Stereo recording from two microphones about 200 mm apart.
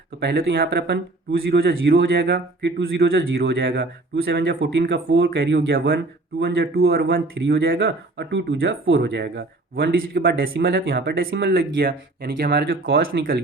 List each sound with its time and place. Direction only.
0.2 s speech: 55° right (ahead or behind)